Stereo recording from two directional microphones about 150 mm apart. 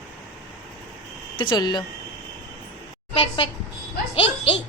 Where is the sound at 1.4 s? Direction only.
30° left (ahead or behind).